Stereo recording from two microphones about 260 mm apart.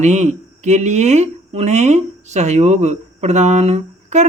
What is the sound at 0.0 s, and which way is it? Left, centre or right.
Speech, right.